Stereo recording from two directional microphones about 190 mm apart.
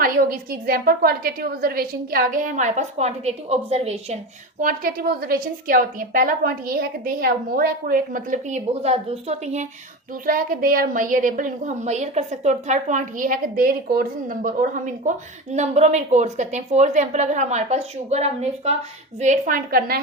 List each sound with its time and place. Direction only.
0.0 s a woman's voice: 45° right (ahead or behind)
4.6 s a woman's voice: 50° right (ahead or behind)
10.2 s a woman's voice: 50° right (ahead or behind)
15.5 s a woman's voice: 35° right (ahead or behind)